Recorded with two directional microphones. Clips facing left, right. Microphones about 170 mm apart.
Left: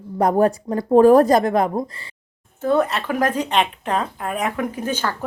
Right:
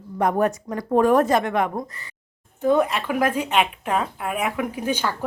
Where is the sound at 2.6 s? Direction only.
15° right (ahead or behind).